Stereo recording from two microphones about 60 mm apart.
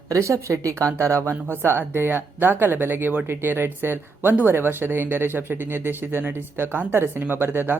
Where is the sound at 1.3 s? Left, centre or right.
Right.